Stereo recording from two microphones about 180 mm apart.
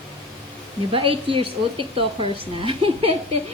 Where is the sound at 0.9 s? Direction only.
30° right (ahead or behind).